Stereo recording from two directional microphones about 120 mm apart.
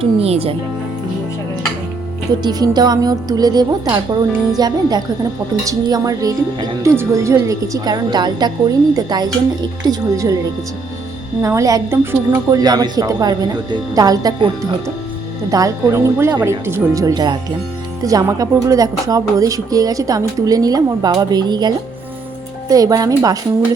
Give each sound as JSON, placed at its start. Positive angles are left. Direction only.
{"t": 0.0, "sound": "speech", "side_deg": -55}
{"t": 2.4, "sound": "speech", "side_deg": -35}
{"t": 11.4, "sound": "speech", "side_deg": -25}
{"t": 14.3, "sound": "speech", "side_deg": -45}
{"t": 15.4, "sound": "speech", "side_deg": -30}
{"t": 22.7, "sound": "speech", "side_deg": -30}